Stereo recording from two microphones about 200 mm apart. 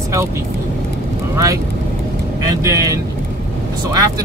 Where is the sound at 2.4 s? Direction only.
15° right (ahead or behind).